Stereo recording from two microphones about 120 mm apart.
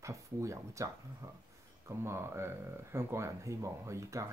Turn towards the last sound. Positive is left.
turn(degrees=-25)  # may be behind; listen again after turning